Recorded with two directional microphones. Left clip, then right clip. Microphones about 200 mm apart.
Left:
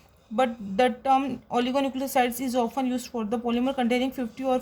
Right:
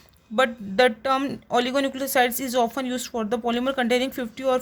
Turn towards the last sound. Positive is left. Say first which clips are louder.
# right 3 dB
turn(degrees=-40)  # may be behind; listen again after turning